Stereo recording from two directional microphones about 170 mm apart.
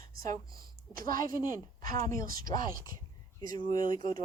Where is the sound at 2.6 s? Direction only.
55° right (ahead or behind).